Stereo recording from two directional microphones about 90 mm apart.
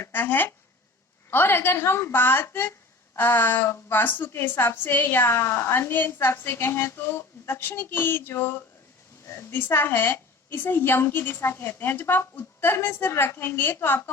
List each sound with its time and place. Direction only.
0.0 s a woman's voice: 20° left (ahead or behind)